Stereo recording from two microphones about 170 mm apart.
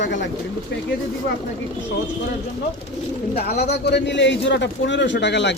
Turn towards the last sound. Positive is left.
turn(degrees=90)